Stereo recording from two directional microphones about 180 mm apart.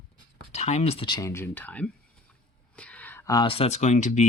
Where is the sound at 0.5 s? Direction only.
35° left (ahead or behind).